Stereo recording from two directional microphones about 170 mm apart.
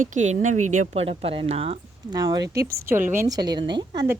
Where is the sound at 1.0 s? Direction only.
35° right (ahead or behind).